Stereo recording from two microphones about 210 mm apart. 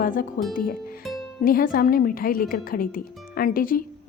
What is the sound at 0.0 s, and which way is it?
A woman's voice, 40° left (ahead or behind).